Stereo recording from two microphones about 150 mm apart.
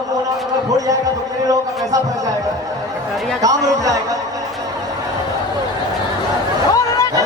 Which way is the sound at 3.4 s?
25° right (ahead or behind).